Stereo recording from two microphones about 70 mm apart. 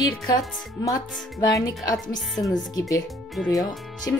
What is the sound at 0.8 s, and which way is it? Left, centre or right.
Speech, left.